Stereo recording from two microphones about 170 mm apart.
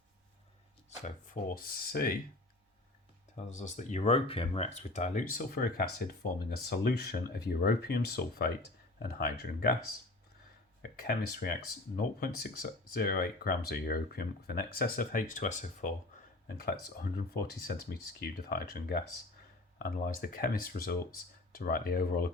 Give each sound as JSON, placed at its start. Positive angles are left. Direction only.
{"t": 0.9, "sound": "speech", "side_deg": 50}
{"t": 3.5, "sound": "speech", "side_deg": 45}
{"t": 10.9, "sound": "speech", "side_deg": 65}
{"t": 17.0, "sound": "speech", "side_deg": 65}